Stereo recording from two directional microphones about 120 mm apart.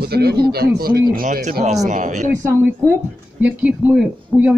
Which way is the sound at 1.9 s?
90° right.